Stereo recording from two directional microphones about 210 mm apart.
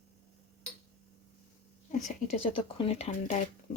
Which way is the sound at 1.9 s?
35° left (ahead or behind).